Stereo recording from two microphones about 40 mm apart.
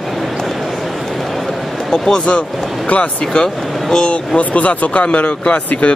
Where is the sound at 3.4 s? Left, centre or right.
Left.